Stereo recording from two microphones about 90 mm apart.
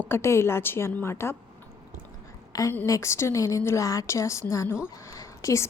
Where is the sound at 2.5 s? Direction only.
40° left (ahead or behind).